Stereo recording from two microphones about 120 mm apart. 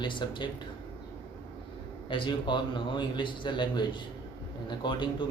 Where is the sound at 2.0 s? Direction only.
45° left (ahead or behind).